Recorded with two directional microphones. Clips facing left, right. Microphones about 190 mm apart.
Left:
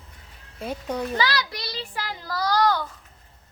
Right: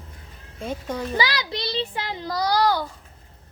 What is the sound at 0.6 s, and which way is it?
Speech, 5° left (ahead or behind).